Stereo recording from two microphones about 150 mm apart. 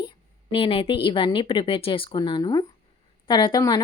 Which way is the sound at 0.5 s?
40° left (ahead or behind).